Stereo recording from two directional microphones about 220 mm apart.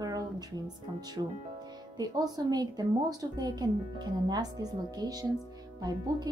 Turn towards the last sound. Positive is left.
turn(degrees=-20)  # may be behind; listen again after turning